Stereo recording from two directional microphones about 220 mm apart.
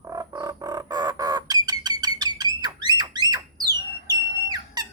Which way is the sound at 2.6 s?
20° right (ahead or behind).